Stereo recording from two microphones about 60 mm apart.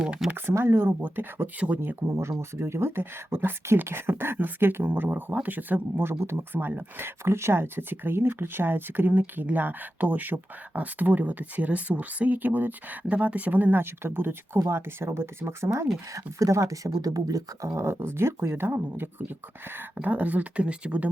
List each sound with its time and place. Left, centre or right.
0.3 s speech: right
1.5 s speech: right
1.8 s speech: right
6.0 s speech: right
17.7 s speech: right
19.7 s speech: right